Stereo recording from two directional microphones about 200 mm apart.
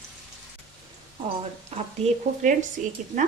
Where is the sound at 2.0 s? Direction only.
40° right (ahead or behind).